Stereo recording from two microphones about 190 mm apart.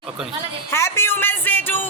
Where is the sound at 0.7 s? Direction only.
15° left (ahead or behind).